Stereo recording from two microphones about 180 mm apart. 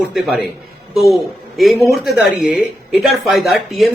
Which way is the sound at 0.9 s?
Centre (ahead or behind).